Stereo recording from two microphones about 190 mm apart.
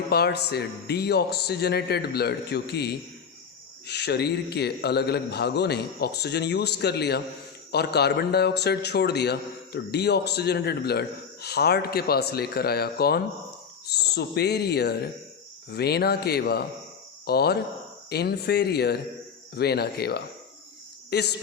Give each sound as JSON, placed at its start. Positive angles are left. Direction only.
{"t": 0.1, "sound": "a man's voice", "side_deg": 55}